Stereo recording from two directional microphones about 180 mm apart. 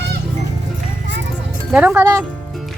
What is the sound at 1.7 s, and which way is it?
Speech, 10° right (ahead or behind).